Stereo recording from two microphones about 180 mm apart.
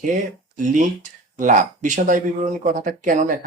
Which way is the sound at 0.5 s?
45° right (ahead or behind).